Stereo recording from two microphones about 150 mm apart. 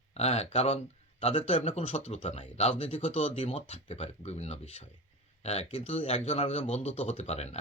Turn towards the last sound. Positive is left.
turn(degrees=45)  # may be behind; listen again after turning